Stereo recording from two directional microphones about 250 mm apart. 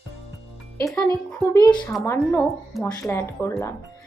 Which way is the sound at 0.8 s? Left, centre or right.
Centre.